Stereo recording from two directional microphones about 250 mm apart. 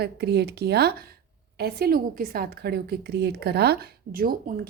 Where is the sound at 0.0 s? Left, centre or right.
Right.